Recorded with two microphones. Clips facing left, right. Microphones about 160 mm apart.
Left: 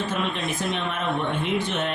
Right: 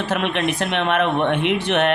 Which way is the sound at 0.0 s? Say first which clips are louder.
Right 6 dB; 70° right (ahead or behind).